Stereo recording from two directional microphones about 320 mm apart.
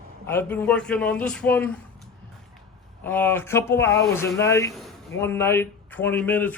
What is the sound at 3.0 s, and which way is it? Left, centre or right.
Speech, centre.